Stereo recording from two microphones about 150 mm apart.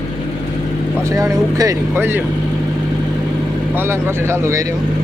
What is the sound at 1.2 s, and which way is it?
Speech, 20° right (ahead or behind).